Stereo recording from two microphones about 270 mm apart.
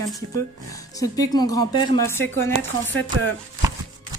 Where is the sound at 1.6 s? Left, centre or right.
Right.